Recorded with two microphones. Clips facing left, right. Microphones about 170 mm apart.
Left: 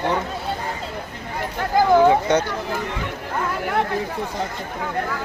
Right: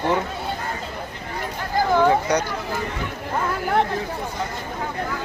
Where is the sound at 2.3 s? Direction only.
25° left (ahead or behind).